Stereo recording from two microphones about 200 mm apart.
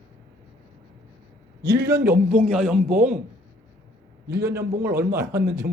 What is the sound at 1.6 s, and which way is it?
Speech, 55° right (ahead or behind).